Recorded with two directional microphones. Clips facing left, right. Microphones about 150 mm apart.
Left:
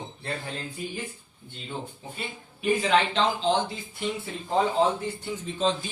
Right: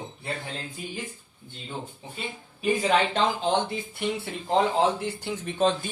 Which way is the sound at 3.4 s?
60° right (ahead or behind).